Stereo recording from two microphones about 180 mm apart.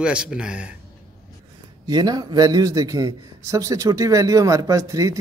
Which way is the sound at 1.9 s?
20° right (ahead or behind).